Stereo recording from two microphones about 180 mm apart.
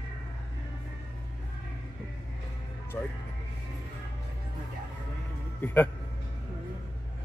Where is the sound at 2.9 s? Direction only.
5° left (ahead or behind).